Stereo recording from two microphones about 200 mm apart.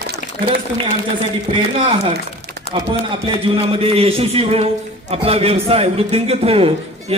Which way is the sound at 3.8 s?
30° right (ahead or behind).